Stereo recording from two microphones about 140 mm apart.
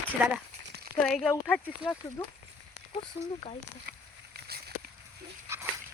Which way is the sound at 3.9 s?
75° right (ahead or behind).